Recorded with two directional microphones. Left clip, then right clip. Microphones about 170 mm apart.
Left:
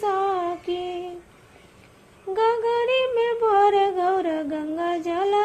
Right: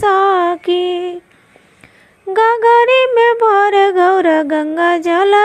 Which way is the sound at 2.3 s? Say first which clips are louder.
Right 11 dB; 40° right (ahead or behind).